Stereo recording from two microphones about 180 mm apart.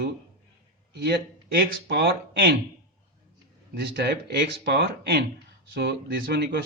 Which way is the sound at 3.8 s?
65° right (ahead or behind).